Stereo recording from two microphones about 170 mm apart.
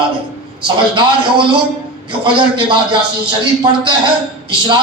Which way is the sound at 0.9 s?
30° right (ahead or behind).